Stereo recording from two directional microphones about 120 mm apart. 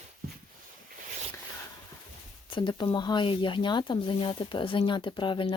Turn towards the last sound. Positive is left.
turn(degrees=45)  # may be behind; listen again after turning